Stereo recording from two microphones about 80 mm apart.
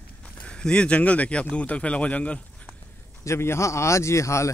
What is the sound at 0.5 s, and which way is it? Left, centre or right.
Speech, centre.